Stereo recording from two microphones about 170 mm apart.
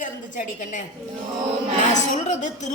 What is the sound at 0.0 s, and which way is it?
Speech, 50° left (ahead or behind).